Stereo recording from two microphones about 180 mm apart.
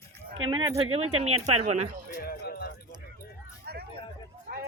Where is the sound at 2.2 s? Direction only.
60° left (ahead or behind).